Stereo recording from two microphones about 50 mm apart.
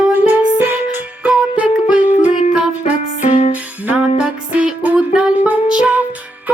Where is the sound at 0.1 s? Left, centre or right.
Right.